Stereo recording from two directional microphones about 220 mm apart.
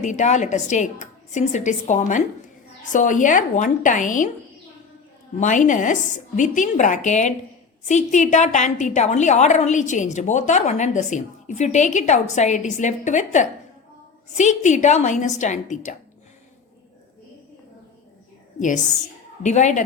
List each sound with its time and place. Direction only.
0.0 s a woman's voice: 35° left (ahead or behind)
5.4 s a woman's voice: 35° left (ahead or behind)
19.4 s a woman's voice: 35° left (ahead or behind)